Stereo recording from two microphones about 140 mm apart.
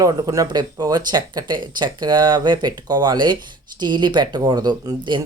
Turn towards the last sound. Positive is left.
turn(degrees=-35)  # may be behind; listen again after turning